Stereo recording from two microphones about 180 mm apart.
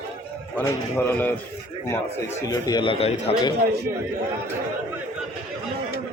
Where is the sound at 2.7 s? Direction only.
25° left (ahead or behind).